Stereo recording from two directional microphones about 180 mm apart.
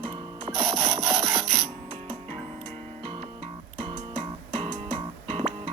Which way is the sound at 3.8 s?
35° right (ahead or behind).